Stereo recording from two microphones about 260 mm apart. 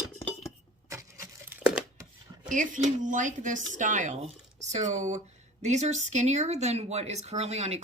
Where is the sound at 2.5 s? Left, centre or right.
Right.